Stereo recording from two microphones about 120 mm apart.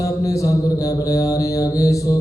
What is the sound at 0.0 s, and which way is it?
Mantra, 30° left (ahead or behind).